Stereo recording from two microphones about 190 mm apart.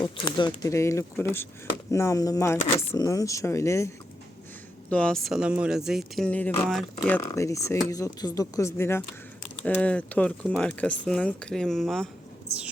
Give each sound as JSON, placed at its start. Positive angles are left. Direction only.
{"t": 0.0, "sound": "speech", "side_deg": 25}
{"t": 7.2, "sound": "speech", "side_deg": 15}